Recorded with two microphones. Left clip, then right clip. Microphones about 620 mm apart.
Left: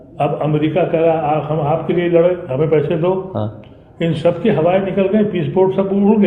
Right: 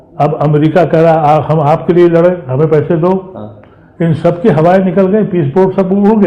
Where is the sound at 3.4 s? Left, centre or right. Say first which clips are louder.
Left 4 dB; left.